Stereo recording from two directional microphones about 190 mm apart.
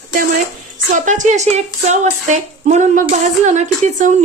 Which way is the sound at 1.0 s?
40° right (ahead or behind).